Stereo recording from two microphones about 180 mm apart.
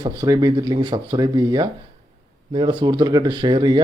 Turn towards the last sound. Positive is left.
turn(degrees=-25)  # may be behind; listen again after turning